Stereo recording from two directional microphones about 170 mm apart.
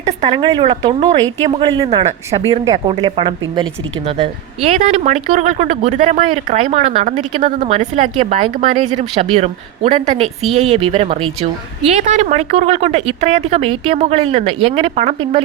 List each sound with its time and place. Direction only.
0.3 s speech: 25° right (ahead or behind)